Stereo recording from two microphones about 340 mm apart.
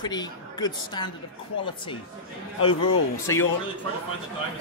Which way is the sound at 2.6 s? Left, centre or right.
Left.